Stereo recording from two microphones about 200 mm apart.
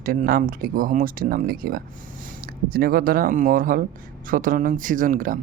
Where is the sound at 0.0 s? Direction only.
45° right (ahead or behind).